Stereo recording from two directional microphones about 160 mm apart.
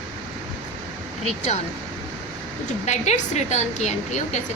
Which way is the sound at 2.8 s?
45° left (ahead or behind).